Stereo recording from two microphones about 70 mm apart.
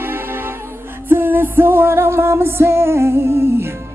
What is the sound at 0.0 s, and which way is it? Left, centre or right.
Music, right.